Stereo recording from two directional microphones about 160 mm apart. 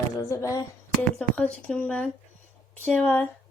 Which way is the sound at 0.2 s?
20° left (ahead or behind).